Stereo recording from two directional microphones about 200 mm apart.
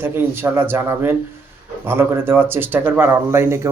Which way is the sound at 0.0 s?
10° right (ahead or behind).